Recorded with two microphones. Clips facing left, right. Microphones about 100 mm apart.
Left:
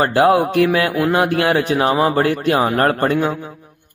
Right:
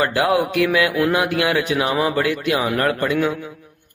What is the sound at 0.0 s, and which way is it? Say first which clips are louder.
A man's voice: left 4 dB; 35° left (ahead or behind).